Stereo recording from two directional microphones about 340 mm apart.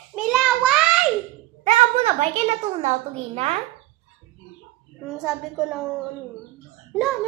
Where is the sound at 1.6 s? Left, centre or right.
Centre.